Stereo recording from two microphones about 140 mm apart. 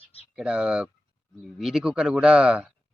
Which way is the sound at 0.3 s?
5° right (ahead or behind).